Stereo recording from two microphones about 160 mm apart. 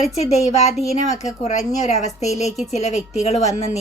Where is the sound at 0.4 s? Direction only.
45° left (ahead or behind).